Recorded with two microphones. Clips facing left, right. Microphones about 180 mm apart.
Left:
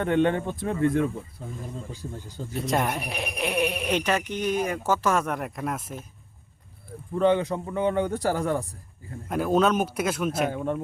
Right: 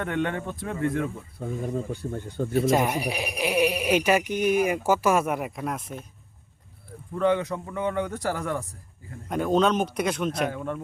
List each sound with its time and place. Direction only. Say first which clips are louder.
0.0 s a man's voice: left 5 dB; 30° left (ahead or behind)
1.4 s speech: right 7 dB; 60° right (ahead or behind)
2.5 s speech: right 4 dB; centre (ahead or behind)
7.2 s a man's voice: left 2 dB; 30° left (ahead or behind)
9.3 s speech: even; 5° left (ahead or behind)
10.5 s a man's voice: left 3 dB; 25° left (ahead or behind)